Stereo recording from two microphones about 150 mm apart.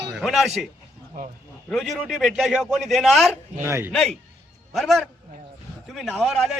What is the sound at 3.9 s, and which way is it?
A man's voice, 5° left (ahead or behind).